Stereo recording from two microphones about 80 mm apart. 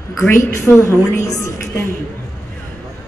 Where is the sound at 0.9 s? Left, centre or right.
Left.